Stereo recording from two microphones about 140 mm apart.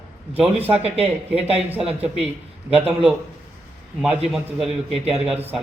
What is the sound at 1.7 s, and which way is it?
A man's voice, 10° right (ahead or behind).